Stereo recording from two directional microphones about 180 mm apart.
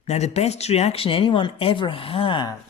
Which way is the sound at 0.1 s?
35° left (ahead or behind).